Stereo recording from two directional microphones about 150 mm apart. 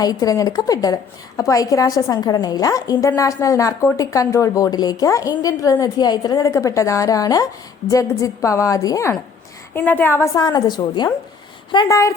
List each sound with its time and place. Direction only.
0.0 s a woman's voice: 25° left (ahead or behind)
10.4 s speech: 30° left (ahead or behind)